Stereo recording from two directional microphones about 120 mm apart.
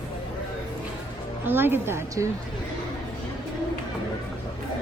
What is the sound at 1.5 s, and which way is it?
Speech, 15° right (ahead or behind).